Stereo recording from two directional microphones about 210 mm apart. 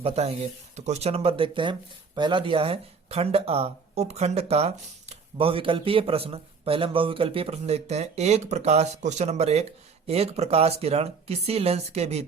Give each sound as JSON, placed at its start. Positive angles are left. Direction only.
{"t": 0.0, "sound": "speech", "side_deg": -30}